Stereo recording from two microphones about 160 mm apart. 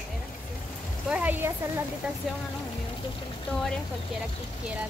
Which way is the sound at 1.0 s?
10° right (ahead or behind).